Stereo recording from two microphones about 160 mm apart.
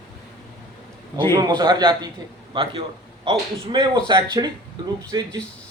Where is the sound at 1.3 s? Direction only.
25° right (ahead or behind).